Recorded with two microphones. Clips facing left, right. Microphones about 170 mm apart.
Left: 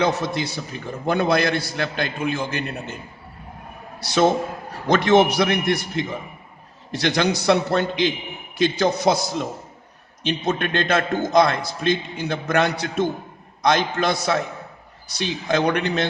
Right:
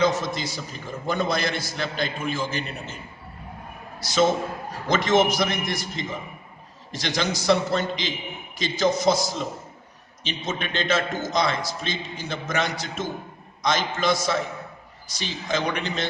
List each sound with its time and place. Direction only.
0.0 s a man's voice: 65° left (ahead or behind)
4.0 s a man's voice: 60° left (ahead or behind)